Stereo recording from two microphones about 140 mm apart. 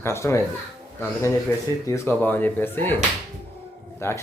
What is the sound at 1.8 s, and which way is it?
A man's voice, 20° left (ahead or behind).